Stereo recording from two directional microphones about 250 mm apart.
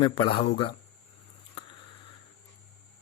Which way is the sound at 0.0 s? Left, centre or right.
Left.